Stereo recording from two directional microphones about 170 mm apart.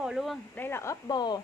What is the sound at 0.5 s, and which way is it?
Speech, 15° left (ahead or behind).